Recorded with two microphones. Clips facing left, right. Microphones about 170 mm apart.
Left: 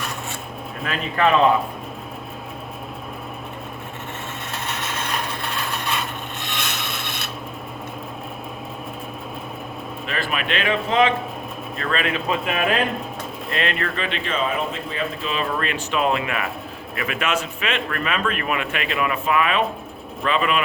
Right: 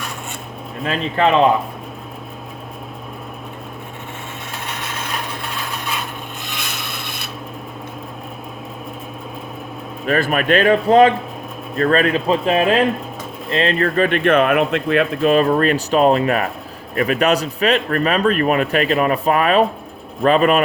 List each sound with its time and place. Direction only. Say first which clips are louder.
0.9 s speech: right 3 dB; 30° right (ahead or behind)
6.5 s rub: left 2 dB; centre (ahead or behind)
10.1 s speech: right 10 dB; 45° right (ahead or behind)